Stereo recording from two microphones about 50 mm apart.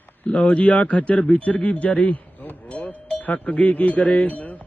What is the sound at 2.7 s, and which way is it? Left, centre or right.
Cowbell, left.